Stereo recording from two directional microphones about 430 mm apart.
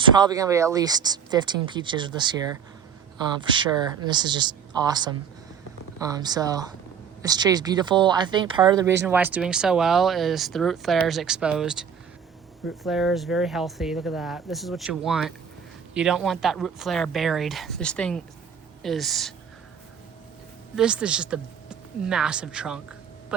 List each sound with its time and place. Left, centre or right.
0.2 s speech: centre
3.4 s speech: centre
20.7 s speech: centre